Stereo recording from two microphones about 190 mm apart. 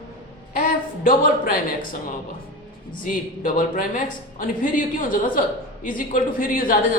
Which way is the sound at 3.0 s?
45° left (ahead or behind).